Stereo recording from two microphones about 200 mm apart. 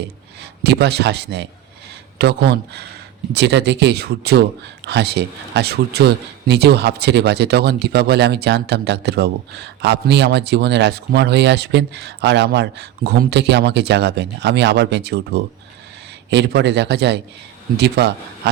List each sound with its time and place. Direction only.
0.6 s speech: 55° right (ahead or behind)